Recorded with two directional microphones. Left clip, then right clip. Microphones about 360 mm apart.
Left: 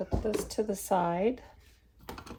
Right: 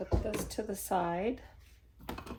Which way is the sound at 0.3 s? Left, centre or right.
Left.